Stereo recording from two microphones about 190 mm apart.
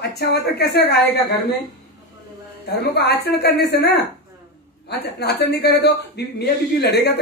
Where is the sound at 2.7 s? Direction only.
60° left (ahead or behind).